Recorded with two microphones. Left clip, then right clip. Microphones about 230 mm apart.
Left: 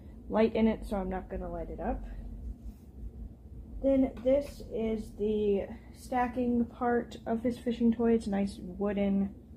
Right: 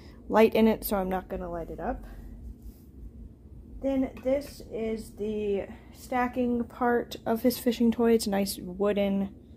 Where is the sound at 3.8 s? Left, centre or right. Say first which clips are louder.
Left 2 dB; right.